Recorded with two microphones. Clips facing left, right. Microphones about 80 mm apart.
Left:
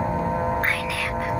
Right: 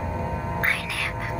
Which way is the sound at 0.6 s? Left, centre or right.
Centre.